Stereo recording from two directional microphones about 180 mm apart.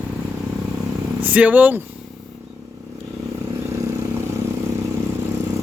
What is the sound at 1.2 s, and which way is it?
Speech, 10° right (ahead or behind).